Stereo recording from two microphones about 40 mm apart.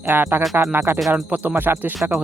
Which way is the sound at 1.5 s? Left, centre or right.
Right.